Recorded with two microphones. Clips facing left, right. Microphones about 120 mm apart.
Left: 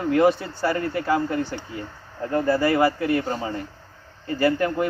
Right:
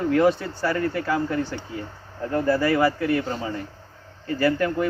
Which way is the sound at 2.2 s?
20° left (ahead or behind).